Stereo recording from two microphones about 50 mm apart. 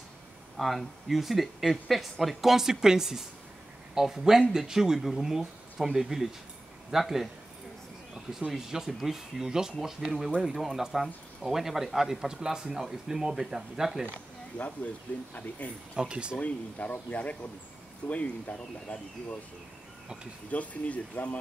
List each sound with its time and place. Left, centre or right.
0.6 s speech: centre
14.5 s speech: left
16.0 s speech: centre
16.3 s speech: left
20.5 s speech: left